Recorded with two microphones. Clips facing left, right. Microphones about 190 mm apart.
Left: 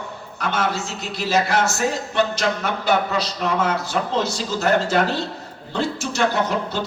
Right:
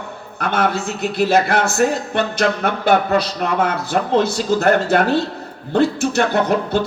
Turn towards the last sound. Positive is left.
turn(degrees=-55)  # may be behind; listen again after turning